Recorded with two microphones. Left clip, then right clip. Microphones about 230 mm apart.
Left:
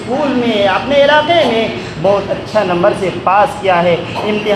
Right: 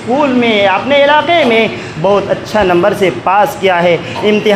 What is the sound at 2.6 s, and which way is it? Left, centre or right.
Speech, right.